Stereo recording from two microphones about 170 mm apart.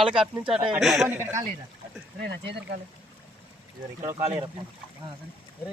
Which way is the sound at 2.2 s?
80° right.